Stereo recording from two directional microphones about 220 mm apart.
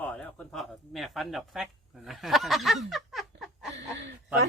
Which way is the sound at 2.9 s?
Centre (ahead or behind).